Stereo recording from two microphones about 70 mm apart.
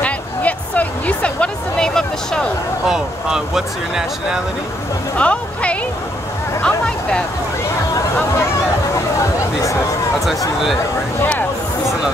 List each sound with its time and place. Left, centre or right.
0.0 s a sound: left
2.9 s speech: centre
5.1 s speech: centre